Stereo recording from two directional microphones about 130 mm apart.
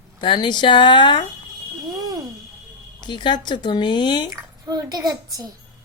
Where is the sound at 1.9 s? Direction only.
30° right (ahead or behind).